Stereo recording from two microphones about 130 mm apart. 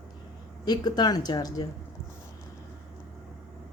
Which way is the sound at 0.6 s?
30° left (ahead or behind).